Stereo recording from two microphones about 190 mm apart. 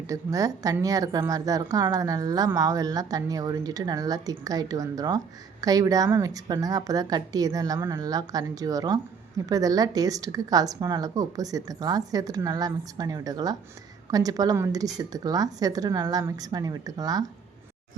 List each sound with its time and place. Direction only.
0.1 s a woman's voice: 15° right (ahead or behind)